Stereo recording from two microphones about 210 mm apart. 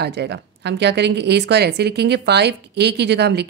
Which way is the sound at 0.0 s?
55° right (ahead or behind).